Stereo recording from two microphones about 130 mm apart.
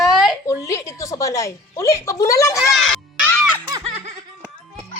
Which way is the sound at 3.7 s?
35° right (ahead or behind).